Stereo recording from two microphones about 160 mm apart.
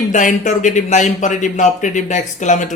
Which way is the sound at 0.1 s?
50° left (ahead or behind).